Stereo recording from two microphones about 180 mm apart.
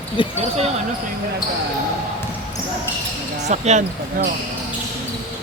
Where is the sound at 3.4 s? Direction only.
40° right (ahead or behind).